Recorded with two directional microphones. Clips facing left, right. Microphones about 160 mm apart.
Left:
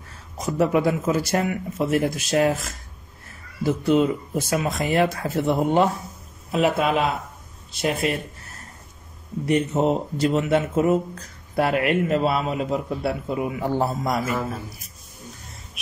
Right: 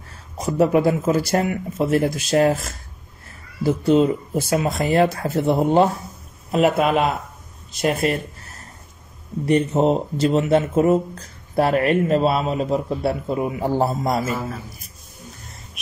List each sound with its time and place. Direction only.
0.4 s a man's voice: 35° right (ahead or behind)
3.6 s a man's voice: 30° right (ahead or behind)
6.5 s speech: 50° right (ahead or behind)
8.0 s a man's voice: 40° right (ahead or behind)
9.5 s a man's voice: 30° right (ahead or behind)